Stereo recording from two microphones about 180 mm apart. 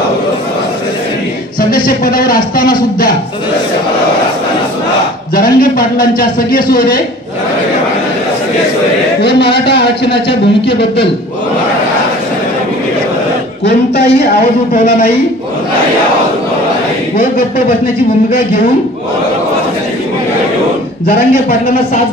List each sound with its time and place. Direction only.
1.9 s a man's voice: 50° left (ahead or behind)
5.3 s a man's voice: 55° left (ahead or behind)
9.2 s a man's voice: 65° left (ahead or behind)